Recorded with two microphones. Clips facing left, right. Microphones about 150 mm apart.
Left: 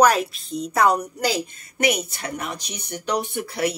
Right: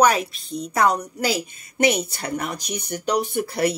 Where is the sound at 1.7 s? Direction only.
25° right (ahead or behind).